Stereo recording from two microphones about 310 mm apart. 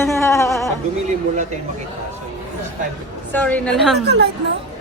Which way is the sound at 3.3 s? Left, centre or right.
Centre.